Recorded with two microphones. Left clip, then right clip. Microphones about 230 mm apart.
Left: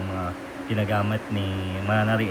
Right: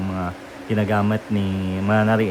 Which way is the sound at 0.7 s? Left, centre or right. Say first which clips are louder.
Right 5 dB; right.